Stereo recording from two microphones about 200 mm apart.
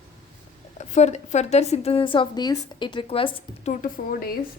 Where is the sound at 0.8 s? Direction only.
35° left (ahead or behind).